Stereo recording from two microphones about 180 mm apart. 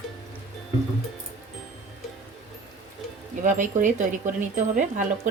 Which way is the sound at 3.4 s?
45° right (ahead or behind).